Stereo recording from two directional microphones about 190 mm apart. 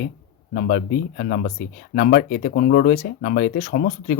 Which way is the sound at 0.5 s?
50° left (ahead or behind).